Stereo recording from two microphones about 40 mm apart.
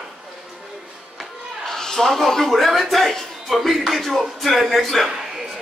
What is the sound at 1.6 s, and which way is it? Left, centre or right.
A man's voice, centre.